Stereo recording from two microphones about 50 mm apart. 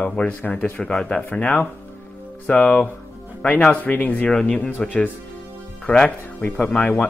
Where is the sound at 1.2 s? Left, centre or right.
Left.